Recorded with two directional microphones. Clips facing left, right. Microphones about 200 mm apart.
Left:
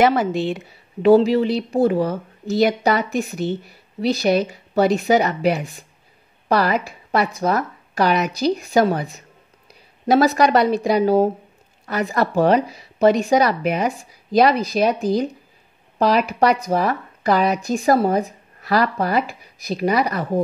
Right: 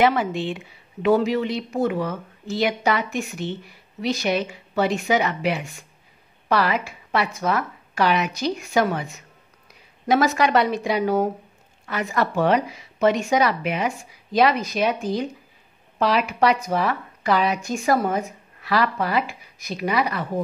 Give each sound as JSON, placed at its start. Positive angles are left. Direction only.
{"t": 0.0, "sound": "speech", "side_deg": 40}